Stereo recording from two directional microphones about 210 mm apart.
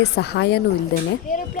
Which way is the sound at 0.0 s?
55° left (ahead or behind).